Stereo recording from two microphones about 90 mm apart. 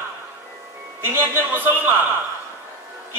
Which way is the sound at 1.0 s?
25° right (ahead or behind).